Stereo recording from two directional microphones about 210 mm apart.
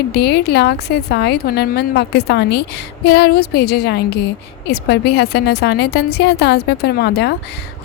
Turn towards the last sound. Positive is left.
turn(degrees=50)  # may be behind; listen again after turning